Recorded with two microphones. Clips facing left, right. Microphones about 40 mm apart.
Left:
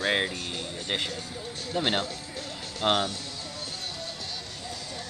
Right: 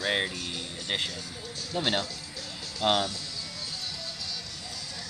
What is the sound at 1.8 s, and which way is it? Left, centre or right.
Speech, left.